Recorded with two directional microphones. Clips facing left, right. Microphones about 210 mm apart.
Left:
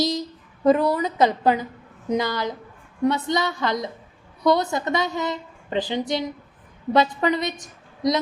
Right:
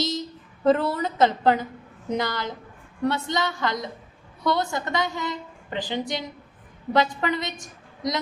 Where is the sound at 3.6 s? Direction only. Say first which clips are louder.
Left 3 dB; 20° left (ahead or behind).